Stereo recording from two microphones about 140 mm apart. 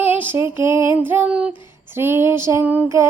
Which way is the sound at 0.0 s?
15° right (ahead or behind).